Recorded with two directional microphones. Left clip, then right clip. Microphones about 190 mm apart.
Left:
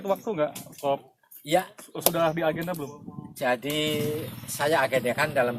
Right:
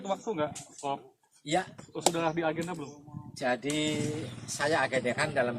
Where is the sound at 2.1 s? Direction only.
55° left (ahead or behind).